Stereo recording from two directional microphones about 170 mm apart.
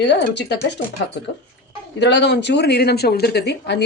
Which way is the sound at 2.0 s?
90° left.